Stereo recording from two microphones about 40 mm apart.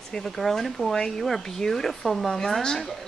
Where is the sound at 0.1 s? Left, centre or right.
Centre.